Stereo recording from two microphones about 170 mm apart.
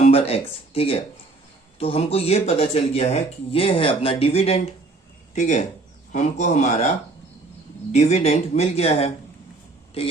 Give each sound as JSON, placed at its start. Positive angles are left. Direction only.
{"t": 0.0, "sound": "speech", "side_deg": 35}
{"t": 7.9, "sound": "speech", "side_deg": 40}